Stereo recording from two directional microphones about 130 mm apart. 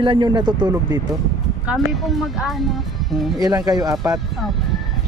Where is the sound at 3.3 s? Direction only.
30° right (ahead or behind).